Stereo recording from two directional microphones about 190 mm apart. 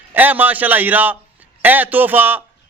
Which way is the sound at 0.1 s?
10° right (ahead or behind).